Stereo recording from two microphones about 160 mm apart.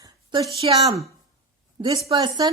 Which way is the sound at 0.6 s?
30° right (ahead or behind).